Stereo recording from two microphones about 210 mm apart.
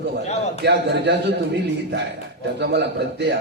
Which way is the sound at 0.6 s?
55° right (ahead or behind).